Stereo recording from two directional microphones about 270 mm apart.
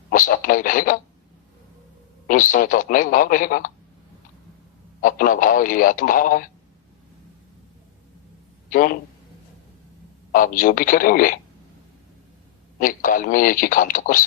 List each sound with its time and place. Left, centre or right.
0.1 s speech: left
2.2 s speech: left
4.9 s speech: left
8.7 s speech: left
10.3 s speech: left
12.8 s speech: left